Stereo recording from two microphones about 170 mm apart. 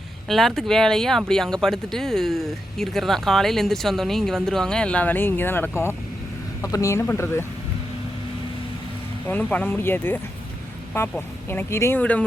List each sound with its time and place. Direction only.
0.3 s speech: centre (ahead or behind)
9.2 s speech: 10° left (ahead or behind)
11.4 s speech: 15° left (ahead or behind)